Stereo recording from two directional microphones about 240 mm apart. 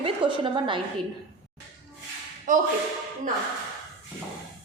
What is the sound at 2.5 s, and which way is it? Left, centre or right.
Speech, right.